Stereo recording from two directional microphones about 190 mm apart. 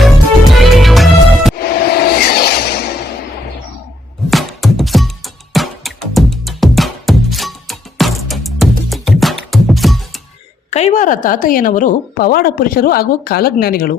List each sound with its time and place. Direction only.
0.0 s music: centre (ahead or behind)
1.5 s music: 55° left (ahead or behind)
4.3 s music: centre (ahead or behind)
10.7 s a woman's voice: 35° left (ahead or behind)